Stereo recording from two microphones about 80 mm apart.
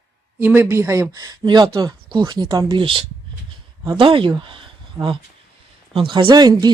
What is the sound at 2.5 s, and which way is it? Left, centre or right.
Speech, right.